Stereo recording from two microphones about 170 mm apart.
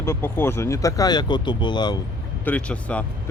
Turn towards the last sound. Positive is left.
turn(degrees=10)  # may be behind; listen again after turning